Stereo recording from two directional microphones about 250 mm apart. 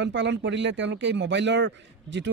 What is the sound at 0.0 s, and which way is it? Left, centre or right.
Speech, right.